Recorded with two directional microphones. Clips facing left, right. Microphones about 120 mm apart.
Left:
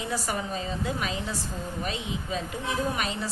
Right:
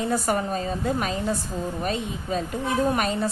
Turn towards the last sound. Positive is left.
turn(degrees=-50)  # may be behind; listen again after turning